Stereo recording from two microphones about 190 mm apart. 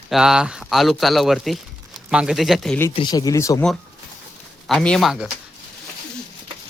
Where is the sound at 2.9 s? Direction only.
25° left (ahead or behind).